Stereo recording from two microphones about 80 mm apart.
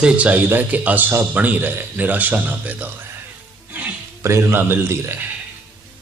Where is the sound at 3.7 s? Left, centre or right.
Centre.